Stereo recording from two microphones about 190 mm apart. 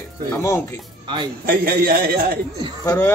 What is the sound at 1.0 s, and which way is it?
Speech, 25° right (ahead or behind).